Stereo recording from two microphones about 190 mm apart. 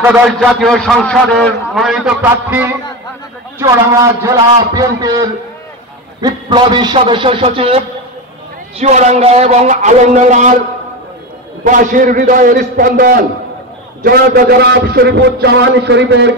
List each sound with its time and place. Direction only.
0.4 s a man's voice: centre (ahead or behind); by 10.5 s 40° right (ahead or behind)
11.6 s a man's voice: 45° right (ahead or behind); by 16.3 s 65° right (ahead or behind)